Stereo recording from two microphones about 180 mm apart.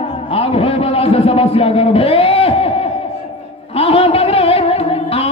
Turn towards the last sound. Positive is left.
turn(degrees=35)  # may be behind; listen again after turning